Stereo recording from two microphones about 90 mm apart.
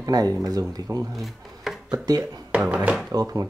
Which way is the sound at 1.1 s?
Centre (ahead or behind).